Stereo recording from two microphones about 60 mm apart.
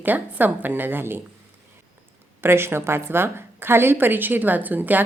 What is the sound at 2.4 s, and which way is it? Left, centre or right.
A woman's voice, right.